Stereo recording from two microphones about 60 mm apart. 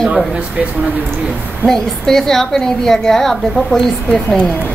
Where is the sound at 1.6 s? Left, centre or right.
Centre.